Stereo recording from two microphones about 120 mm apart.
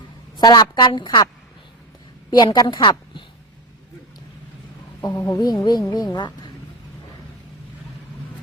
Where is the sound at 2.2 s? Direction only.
35° left (ahead or behind).